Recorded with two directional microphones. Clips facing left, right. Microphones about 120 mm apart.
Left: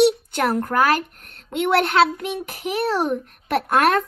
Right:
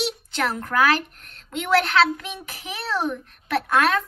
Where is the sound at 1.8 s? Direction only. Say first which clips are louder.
Left 3 dB; 30° left (ahead or behind).